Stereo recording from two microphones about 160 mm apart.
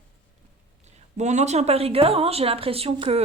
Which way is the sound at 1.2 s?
45° right (ahead or behind).